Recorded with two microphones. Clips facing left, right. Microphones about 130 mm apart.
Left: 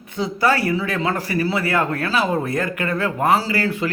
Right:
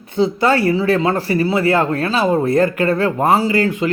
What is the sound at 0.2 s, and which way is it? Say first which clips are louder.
A man's voice: right 5 dB; 25° right (ahead or behind).